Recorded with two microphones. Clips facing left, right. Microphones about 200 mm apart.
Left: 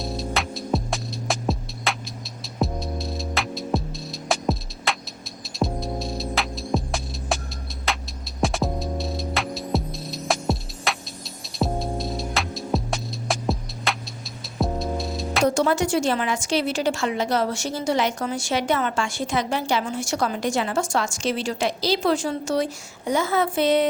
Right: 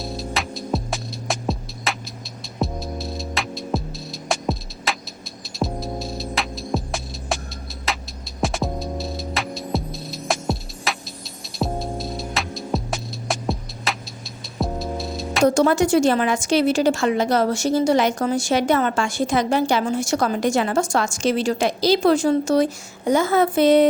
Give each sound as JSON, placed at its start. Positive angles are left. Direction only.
{"t": 0.0, "sound": "music", "side_deg": 0}
{"t": 15.4, "sound": "a woman's voice", "side_deg": -45}